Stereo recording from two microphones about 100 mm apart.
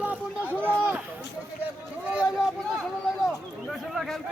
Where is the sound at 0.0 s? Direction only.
15° right (ahead or behind).